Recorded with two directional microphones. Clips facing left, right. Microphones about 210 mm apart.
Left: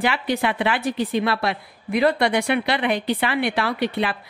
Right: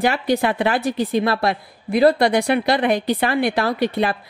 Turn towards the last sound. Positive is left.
turn(degrees=-40)  # may be behind; listen again after turning